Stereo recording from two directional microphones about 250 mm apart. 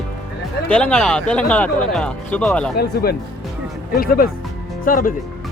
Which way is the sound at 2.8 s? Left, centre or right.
Left.